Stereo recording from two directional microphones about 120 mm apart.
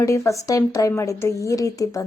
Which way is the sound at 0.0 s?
25° left (ahead or behind).